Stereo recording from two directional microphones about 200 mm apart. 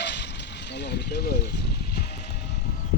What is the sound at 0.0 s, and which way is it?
Vehicle, 60° left (ahead or behind).